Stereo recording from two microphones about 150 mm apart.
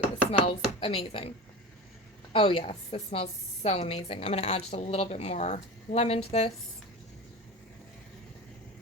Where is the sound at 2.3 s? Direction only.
40° left (ahead or behind).